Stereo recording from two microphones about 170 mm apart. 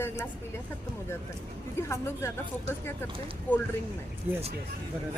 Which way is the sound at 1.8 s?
15° left (ahead or behind).